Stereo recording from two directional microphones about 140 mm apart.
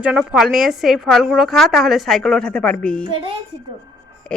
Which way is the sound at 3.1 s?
40° right (ahead or behind).